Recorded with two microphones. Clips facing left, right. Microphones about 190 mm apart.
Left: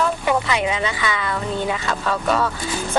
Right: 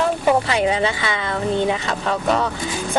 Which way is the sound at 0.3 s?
35° right (ahead or behind).